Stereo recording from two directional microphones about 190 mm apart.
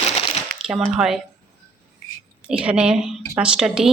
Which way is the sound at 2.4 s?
5° right (ahead or behind).